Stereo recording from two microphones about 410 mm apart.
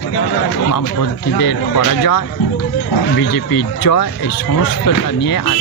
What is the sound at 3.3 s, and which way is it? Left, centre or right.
Speech, left.